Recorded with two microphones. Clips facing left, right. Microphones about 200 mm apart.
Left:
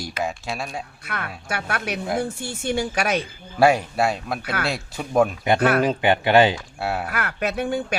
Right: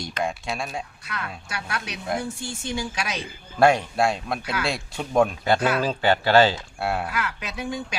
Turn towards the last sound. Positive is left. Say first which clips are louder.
# left 7 dB
turn(degrees=60)  # may be behind; listen again after turning